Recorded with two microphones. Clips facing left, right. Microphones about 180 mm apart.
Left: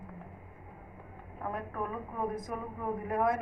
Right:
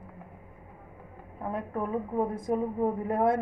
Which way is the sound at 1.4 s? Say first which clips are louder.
Right 4 dB; 25° right (ahead or behind).